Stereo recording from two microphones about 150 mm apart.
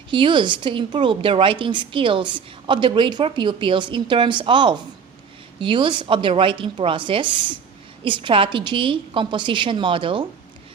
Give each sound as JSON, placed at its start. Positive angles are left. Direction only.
{"t": 0.1, "sound": "a woman's voice", "side_deg": -35}